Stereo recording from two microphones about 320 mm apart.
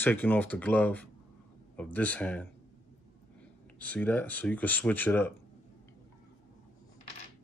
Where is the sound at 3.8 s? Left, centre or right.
Centre.